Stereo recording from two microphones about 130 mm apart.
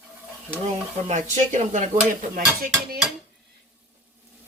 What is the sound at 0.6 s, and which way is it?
Dishes, 65° right (ahead or behind).